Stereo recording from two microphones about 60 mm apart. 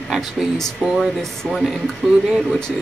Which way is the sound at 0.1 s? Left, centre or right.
Centre.